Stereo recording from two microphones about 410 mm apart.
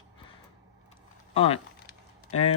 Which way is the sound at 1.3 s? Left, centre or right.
Centre.